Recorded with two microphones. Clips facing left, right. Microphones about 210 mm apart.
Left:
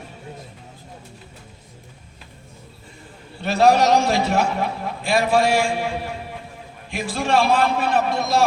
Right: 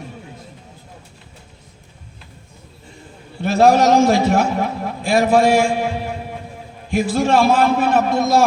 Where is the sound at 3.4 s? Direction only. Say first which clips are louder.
Right 3 dB; 50° right (ahead or behind).